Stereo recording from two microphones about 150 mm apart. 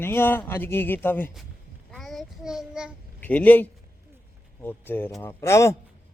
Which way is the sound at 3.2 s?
10° left (ahead or behind).